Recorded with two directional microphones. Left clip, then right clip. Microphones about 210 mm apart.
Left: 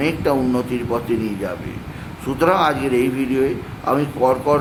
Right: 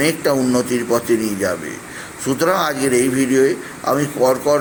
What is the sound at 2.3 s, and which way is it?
A man's voice, 10° right (ahead or behind).